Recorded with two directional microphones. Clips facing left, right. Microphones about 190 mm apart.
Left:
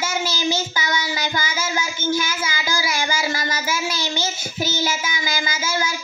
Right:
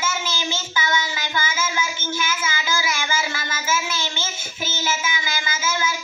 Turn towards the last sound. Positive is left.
turn(degrees=40)  # may be behind; listen again after turning